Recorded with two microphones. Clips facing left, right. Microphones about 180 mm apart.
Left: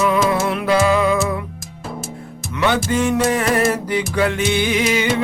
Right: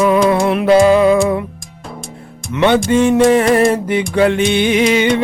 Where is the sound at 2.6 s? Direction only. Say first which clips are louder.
Right 6 dB; 25° right (ahead or behind).